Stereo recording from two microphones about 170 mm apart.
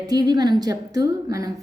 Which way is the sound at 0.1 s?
25° right (ahead or behind).